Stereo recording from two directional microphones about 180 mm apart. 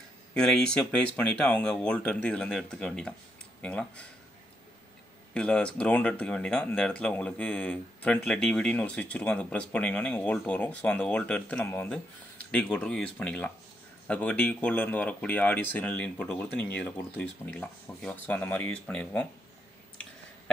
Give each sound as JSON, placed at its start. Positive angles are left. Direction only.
{"t": 0.3, "sound": "speech", "side_deg": 5}
{"t": 5.3, "sound": "speech", "side_deg": 5}